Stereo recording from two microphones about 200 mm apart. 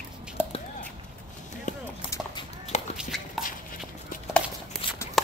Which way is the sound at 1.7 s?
40° left (ahead or behind).